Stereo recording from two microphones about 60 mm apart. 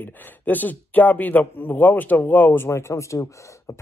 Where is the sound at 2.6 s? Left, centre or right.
Left.